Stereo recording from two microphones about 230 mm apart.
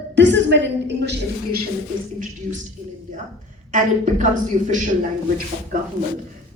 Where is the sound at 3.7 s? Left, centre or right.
Right.